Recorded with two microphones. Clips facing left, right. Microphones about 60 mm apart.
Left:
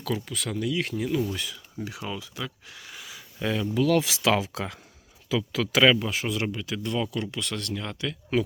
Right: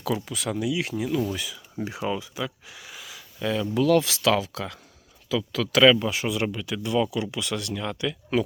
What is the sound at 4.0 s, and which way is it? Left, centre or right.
Speech, centre.